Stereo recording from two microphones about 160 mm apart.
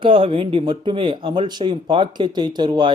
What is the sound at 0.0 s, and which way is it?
A man's voice, 35° right (ahead or behind).